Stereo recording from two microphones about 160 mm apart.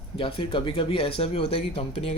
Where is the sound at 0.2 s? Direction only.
35° left (ahead or behind).